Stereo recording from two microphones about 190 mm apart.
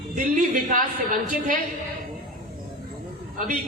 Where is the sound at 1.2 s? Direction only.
45° right (ahead or behind).